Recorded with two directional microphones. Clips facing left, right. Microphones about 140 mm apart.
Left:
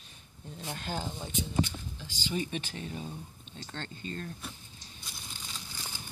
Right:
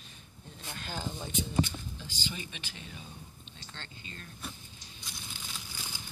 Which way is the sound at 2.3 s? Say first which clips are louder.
Left 10 dB; 40° left (ahead or behind).